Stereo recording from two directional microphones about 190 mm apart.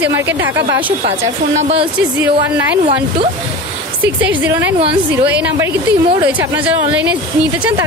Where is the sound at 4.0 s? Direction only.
10° right (ahead or behind).